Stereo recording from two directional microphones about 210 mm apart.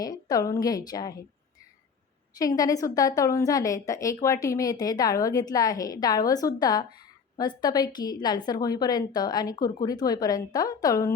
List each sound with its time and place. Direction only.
0.0 s a woman's voice: 15° left (ahead or behind)
2.4 s a woman's voice: 15° left (ahead or behind)